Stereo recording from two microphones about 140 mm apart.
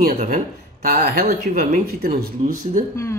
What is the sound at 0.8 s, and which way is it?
Speech, 85° right.